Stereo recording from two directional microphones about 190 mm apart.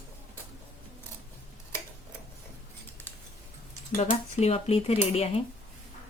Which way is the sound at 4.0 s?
35° left (ahead or behind).